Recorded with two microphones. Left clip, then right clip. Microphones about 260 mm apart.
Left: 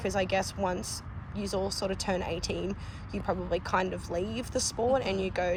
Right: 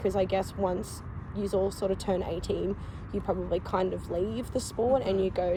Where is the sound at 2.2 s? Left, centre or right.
Left.